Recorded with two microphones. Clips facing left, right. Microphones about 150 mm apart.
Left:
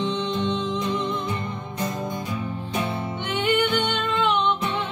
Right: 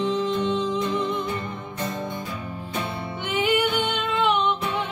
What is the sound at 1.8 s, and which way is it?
Music, 15° left (ahead or behind).